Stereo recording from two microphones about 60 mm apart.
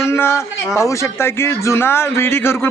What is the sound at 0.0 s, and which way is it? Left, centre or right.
A man's voice, left.